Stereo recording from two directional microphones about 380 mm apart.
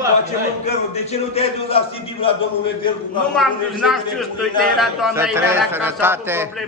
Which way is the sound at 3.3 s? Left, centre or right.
Centre.